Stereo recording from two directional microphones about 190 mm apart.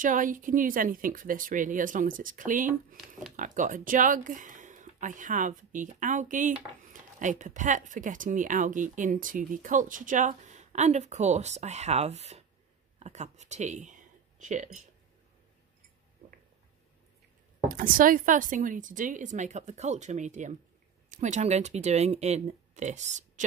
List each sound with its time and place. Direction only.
0.0 s speech: 45° right (ahead or behind)
17.6 s speech: 45° right (ahead or behind)